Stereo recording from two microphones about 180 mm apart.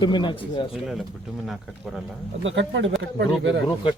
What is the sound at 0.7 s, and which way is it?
Speech, centre (ahead or behind).